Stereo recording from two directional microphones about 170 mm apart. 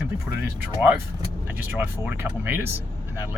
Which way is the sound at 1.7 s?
10° right (ahead or behind).